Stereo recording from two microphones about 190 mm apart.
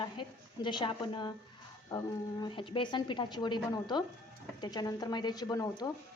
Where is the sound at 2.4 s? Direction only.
25° left (ahead or behind).